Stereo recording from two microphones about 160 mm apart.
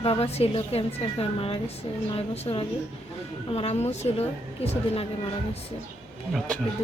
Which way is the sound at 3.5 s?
40° left (ahead or behind).